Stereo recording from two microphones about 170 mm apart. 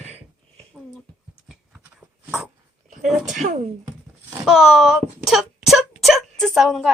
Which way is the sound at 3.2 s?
45° right (ahead or behind).